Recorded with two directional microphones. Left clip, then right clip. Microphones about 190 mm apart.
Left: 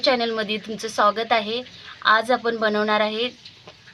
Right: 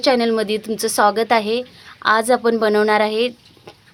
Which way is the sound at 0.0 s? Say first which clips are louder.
Right 4 dB; 45° right (ahead or behind).